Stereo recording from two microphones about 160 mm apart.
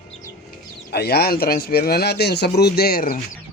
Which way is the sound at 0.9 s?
80° left.